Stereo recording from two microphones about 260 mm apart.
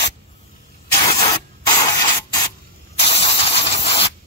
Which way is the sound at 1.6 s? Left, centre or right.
Centre.